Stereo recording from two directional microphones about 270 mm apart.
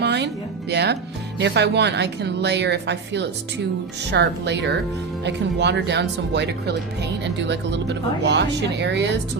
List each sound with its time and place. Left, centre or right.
0.0 s music: right
0.7 s a woman's voice: right